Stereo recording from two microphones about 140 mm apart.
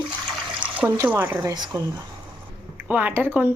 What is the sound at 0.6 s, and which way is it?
A woman's voice, 15° right (ahead or behind).